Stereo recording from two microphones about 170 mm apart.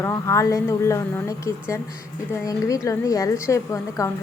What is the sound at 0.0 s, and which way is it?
A woman's voice, 15° left (ahead or behind).